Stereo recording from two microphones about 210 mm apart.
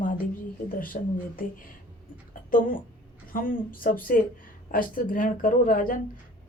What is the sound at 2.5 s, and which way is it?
Speech, 40° left (ahead or behind).